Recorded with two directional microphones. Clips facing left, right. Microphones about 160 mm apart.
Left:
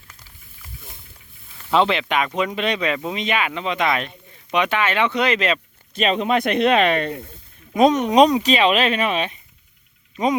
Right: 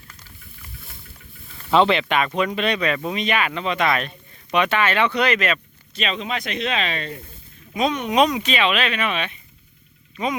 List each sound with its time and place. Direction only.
1.7 s speech: 5° left (ahead or behind); by 5.5 s 25° left (ahead or behind)
5.9 s speech: 50° left (ahead or behind)
7.7 s speech: 45° left (ahead or behind)